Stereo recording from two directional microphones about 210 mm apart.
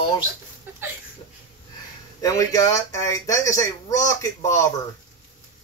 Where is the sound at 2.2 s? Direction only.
15° left (ahead or behind).